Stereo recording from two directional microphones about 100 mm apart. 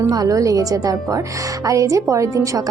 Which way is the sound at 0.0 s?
35° right (ahead or behind).